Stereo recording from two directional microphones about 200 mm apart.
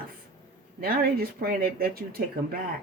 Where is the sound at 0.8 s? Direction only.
50° right (ahead or behind).